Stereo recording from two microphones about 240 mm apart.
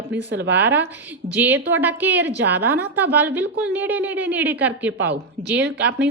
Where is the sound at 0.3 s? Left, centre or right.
Right.